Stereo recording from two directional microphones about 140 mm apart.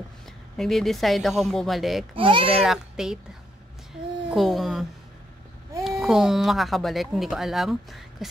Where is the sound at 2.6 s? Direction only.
5° right (ahead or behind).